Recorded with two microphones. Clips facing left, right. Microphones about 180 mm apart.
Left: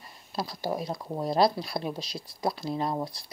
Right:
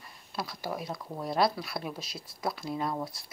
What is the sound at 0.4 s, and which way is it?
Speech, 35° left (ahead or behind).